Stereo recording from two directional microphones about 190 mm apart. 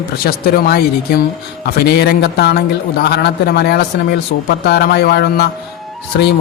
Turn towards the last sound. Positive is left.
turn(degrees=60)  # may be behind; listen again after turning